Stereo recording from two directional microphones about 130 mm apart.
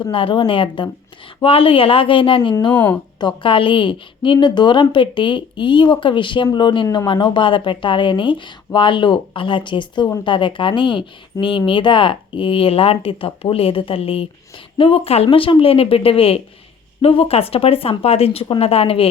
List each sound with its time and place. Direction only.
0.0 s speech: 40° left (ahead or behind)
2.7 s speech: 15° left (ahead or behind)
3.2 s a woman's voice: 35° left (ahead or behind)